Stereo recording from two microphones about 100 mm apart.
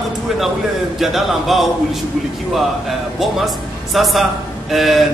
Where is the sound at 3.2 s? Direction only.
Centre (ahead or behind).